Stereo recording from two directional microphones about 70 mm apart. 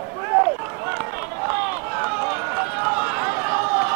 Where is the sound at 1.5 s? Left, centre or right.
Right.